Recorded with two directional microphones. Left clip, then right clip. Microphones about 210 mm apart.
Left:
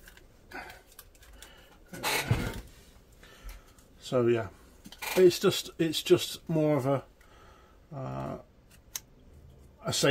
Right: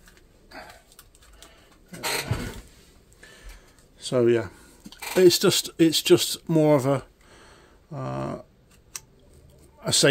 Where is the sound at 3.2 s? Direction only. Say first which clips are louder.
Right 6 dB; 45° right (ahead or behind).